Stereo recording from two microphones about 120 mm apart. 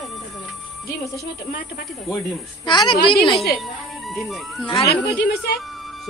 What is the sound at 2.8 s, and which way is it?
Speech, 45° left (ahead or behind).